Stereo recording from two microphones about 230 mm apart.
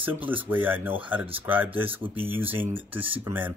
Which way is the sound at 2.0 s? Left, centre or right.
Right.